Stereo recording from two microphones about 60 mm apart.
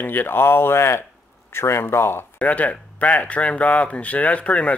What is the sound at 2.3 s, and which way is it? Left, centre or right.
Speech, left.